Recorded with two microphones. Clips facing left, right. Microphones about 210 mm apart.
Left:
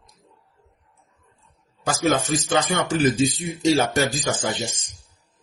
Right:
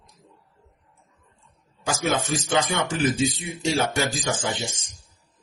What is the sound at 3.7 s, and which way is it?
Speech, 40° left (ahead or behind).